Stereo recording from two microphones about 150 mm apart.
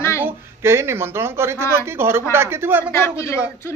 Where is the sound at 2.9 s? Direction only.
20° left (ahead or behind).